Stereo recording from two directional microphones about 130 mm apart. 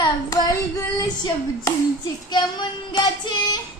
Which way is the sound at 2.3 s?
35° left (ahead or behind).